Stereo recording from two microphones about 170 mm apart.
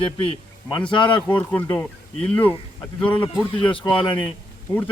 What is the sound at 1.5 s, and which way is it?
Speech, 10° left (ahead or behind).